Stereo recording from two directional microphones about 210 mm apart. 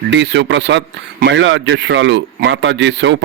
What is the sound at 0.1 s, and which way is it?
A man's voice, 55° right (ahead or behind).